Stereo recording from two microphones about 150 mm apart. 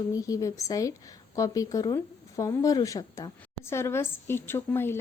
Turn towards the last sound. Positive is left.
turn(degrees=15)  # may be behind; listen again after turning